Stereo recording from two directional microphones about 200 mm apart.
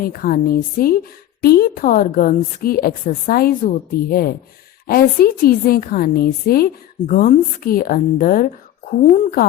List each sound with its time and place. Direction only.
0.0 s a woman's voice: 45° left (ahead or behind)